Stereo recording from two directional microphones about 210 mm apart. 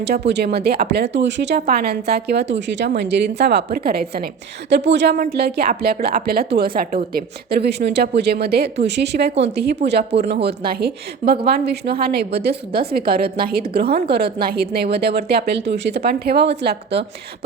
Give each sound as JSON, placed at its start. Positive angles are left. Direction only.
{"t": 0.0, "sound": "speech", "side_deg": -50}